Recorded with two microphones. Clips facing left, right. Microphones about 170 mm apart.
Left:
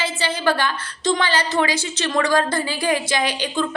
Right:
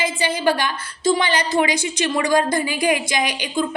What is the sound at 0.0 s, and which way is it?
A woman's voice, 15° right (ahead or behind).